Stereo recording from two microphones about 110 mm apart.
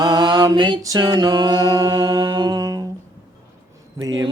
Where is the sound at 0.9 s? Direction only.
40° right (ahead or behind).